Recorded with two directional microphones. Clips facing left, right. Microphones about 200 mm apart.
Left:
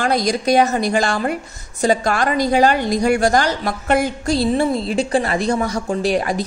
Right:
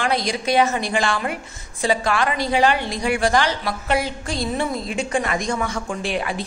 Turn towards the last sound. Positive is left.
turn(degrees=40)  # may be behind; listen again after turning